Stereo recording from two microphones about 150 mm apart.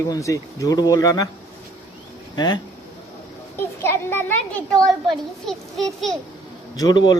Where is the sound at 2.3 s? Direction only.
30° left (ahead or behind).